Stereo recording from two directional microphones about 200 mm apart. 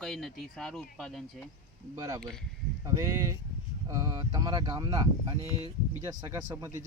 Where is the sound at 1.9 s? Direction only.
20° right (ahead or behind).